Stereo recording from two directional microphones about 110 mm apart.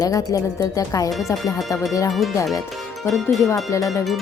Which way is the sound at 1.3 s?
Centre (ahead or behind).